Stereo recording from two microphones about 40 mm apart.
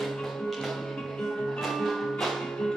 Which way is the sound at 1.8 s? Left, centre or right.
Centre.